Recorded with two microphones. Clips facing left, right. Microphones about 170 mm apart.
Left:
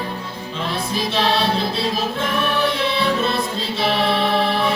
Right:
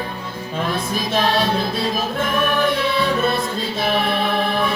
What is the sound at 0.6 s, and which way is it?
Music, 50° right (ahead or behind).